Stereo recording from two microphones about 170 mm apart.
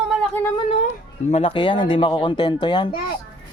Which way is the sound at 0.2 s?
10° left (ahead or behind).